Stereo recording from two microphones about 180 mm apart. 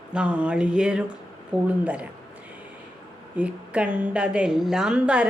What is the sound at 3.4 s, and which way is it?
A woman's voice, 5° right (ahead or behind).